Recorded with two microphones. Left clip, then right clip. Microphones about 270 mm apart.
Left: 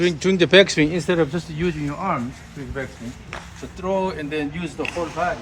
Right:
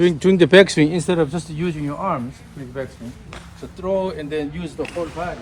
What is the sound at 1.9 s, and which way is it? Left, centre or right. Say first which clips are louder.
Speech: right 4 dB; centre.